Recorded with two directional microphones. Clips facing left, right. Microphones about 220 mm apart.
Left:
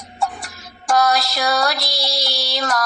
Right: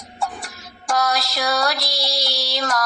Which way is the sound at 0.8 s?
60° left (ahead or behind).